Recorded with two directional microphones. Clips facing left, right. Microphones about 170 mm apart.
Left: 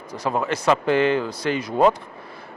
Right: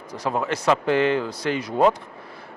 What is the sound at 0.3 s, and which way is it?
Speech, 20° left (ahead or behind).